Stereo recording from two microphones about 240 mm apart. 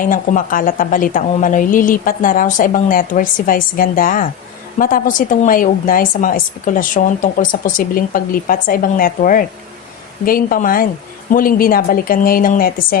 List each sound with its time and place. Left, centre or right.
0.0 s a woman's voice: left